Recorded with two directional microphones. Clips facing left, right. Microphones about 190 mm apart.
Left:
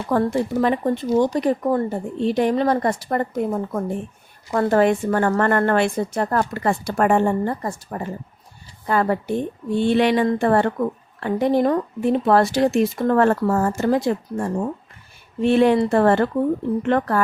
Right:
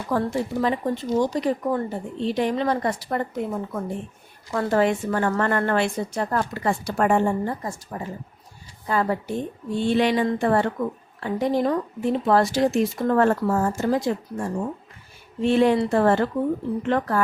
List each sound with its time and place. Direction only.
0.1 s a woman's voice: 55° left (ahead or behind)